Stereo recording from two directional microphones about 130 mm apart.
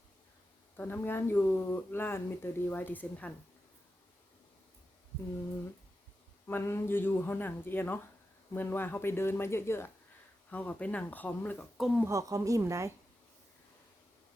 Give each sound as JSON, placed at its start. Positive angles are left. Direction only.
{"t": 0.8, "sound": "speech", "side_deg": 15}
{"t": 6.5, "sound": "speech", "side_deg": 20}
{"t": 12.0, "sound": "speech", "side_deg": -25}